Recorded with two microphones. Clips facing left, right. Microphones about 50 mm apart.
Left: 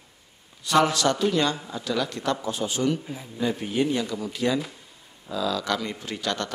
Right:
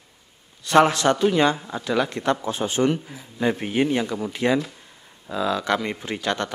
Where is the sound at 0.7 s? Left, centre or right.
Right.